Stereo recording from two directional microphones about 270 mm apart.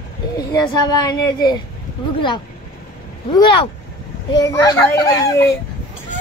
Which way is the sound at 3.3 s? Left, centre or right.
Centre.